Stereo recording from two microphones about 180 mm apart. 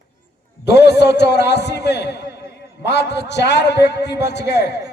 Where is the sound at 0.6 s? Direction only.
70° left (ahead or behind).